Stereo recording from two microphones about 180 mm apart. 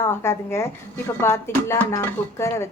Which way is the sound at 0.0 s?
15° left (ahead or behind).